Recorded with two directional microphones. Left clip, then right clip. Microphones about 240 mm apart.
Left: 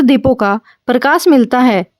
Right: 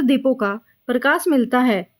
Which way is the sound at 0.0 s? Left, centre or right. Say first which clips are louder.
Left 7 dB; left.